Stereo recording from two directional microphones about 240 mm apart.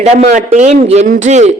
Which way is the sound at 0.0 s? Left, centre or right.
Right.